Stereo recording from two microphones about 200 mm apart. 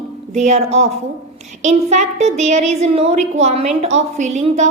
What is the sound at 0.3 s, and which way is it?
A woman's voice, 35° right (ahead or behind).